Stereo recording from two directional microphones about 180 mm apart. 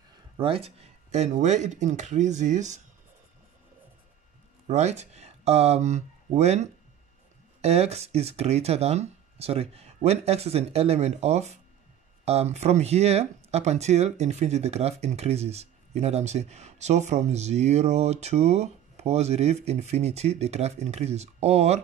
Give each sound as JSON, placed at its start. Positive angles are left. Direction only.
{"t": 0.4, "sound": "speech", "side_deg": -30}
{"t": 4.6, "sound": "speech", "side_deg": -40}